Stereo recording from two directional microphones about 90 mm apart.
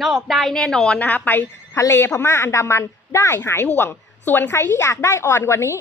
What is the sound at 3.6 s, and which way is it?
Speech, 20° left (ahead or behind).